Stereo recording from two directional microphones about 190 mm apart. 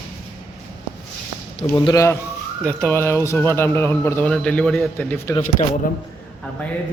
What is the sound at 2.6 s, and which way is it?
Speech, 5° left (ahead or behind).